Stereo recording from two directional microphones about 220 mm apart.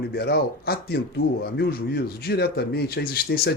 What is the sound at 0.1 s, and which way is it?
Speech, 45° left (ahead or behind).